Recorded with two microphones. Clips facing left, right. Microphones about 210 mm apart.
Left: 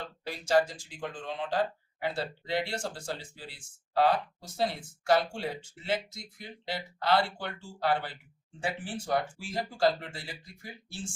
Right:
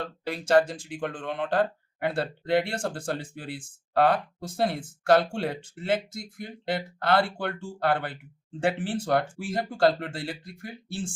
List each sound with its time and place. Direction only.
0.0 s speech: 60° right (ahead or behind)
8.6 s speech: 70° right (ahead or behind)
9.4 s speech: 50° right (ahead or behind)